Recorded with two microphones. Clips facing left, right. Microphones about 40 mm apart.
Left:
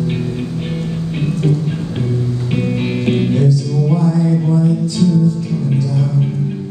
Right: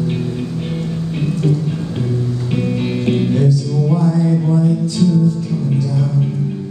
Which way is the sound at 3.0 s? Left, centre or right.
Left.